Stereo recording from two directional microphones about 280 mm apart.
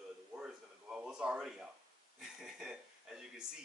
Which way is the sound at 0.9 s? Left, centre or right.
Centre.